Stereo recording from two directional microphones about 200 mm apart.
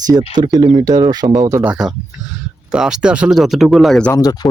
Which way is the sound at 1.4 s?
10° right (ahead or behind).